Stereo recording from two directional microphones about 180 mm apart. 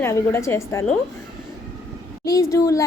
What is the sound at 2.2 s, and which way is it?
Speech, 20° left (ahead or behind).